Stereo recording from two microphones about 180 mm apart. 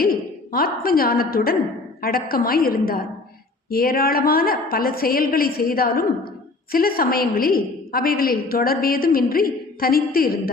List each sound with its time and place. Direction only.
0.0 s a woman's voice: 55° left (ahead or behind)